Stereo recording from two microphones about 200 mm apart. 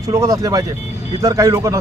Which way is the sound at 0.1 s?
15° right (ahead or behind).